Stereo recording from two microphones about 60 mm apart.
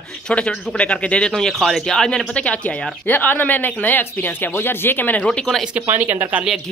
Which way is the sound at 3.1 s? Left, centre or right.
Left.